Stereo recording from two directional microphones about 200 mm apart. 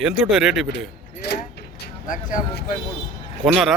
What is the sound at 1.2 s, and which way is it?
Mechanisms, 55° left (ahead or behind).